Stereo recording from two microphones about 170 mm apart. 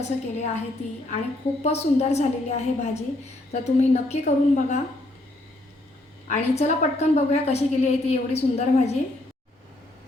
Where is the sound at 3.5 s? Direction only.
40° left (ahead or behind).